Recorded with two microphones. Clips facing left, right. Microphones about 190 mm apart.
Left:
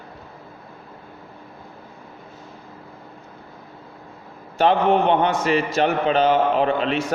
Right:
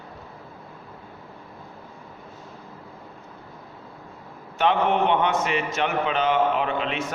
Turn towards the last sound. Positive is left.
turn(degrees=35)  # may be behind; listen again after turning